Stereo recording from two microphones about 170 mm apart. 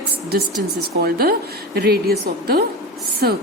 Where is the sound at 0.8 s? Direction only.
65° right (ahead or behind).